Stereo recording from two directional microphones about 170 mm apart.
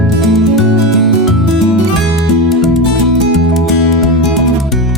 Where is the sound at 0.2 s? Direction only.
Centre (ahead or behind).